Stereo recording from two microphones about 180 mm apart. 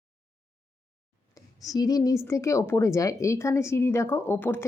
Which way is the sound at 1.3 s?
20° left (ahead or behind).